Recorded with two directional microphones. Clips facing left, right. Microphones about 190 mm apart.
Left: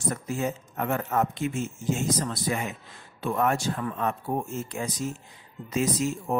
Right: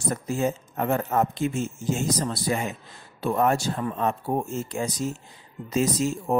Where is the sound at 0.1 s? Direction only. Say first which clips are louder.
Right 5 dB; 30° right (ahead or behind).